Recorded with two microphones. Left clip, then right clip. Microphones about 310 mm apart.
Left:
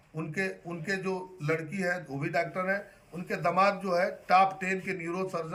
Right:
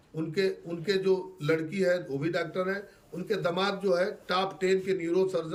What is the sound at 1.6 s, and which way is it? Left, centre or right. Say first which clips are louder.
Speech: right 5 dB; centre.